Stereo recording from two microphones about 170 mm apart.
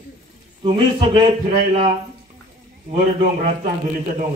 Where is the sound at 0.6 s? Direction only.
30° right (ahead or behind).